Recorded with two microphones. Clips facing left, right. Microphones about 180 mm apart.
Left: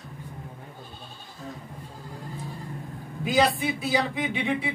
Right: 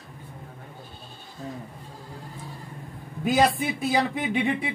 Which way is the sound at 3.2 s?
50° right (ahead or behind).